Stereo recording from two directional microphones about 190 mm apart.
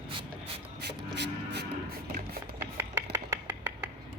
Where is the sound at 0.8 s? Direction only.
65° right (ahead or behind).